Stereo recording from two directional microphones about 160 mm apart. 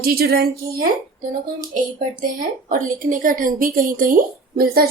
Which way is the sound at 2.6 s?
55° right (ahead or behind).